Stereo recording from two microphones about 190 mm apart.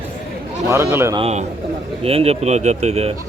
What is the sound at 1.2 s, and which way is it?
Speech, 35° right (ahead or behind).